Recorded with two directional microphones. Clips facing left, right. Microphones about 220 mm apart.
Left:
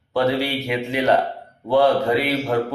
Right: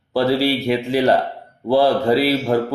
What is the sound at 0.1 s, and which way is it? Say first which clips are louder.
A man's voice: right 3 dB; 35° right (ahead or behind).